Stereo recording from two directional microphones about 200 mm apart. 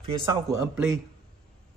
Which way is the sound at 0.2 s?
15° right (ahead or behind).